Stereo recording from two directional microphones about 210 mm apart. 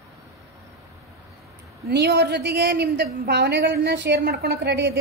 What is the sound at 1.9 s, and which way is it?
A woman's voice, 50° right (ahead or behind).